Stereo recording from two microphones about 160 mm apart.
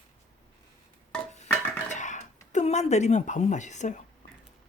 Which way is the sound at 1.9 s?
50° left (ahead or behind).